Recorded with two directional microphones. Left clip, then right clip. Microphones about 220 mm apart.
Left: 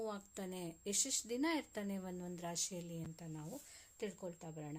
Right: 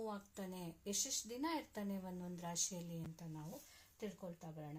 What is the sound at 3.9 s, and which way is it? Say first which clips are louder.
Speech: left 4 dB; 35° left (ahead or behind).